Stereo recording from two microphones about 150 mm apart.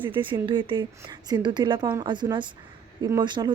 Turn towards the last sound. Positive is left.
turn(degrees=-30)  # may be behind; listen again after turning